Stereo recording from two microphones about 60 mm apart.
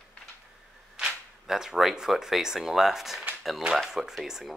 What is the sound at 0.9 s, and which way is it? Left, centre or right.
Speech, centre.